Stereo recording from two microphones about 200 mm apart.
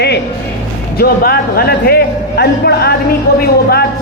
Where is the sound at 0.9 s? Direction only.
50° left (ahead or behind).